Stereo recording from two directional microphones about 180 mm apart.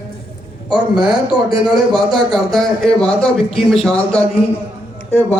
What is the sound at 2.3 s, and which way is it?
Speech, centre (ahead or behind).